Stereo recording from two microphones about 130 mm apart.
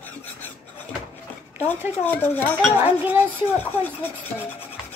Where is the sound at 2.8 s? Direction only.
15° right (ahead or behind).